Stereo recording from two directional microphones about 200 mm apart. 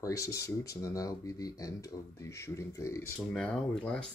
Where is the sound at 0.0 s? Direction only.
15° left (ahead or behind).